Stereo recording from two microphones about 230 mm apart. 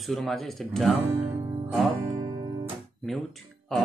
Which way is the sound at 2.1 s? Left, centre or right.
Right.